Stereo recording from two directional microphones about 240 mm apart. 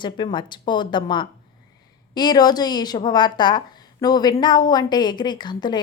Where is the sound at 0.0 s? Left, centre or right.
Centre.